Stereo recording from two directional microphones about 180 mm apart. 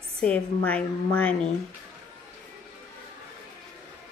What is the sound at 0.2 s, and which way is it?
A woman's voice, 5° left (ahead or behind).